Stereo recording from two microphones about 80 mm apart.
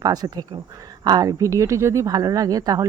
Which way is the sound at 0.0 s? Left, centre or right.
Right.